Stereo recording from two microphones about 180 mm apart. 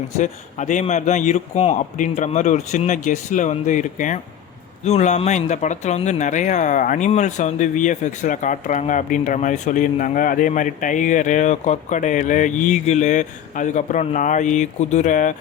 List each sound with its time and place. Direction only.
0.2 s speech: 45° left (ahead or behind)